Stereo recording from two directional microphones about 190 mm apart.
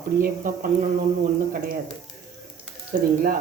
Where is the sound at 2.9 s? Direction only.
45° right (ahead or behind).